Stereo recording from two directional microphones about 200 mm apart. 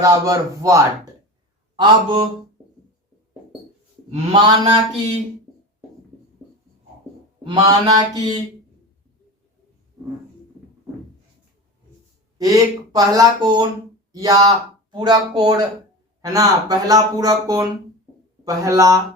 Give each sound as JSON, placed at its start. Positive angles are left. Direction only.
{"t": 0.0, "sound": "speech", "side_deg": -15}
{"t": 4.1, "sound": "speech", "side_deg": -30}
{"t": 7.4, "sound": "speech", "side_deg": -20}
{"t": 12.4, "sound": "speech", "side_deg": -20}